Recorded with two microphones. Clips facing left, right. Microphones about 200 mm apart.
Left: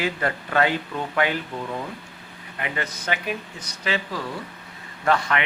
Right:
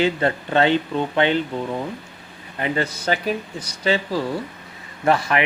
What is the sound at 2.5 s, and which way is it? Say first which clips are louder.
Speech: right 7 dB; 30° right (ahead or behind).